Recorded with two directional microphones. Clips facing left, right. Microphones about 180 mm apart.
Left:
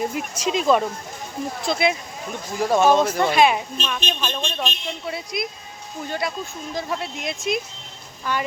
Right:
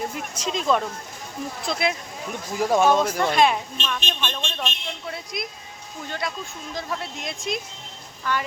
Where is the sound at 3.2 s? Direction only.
5° left (ahead or behind).